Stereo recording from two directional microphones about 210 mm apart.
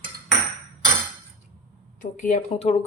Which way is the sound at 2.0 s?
40° left (ahead or behind).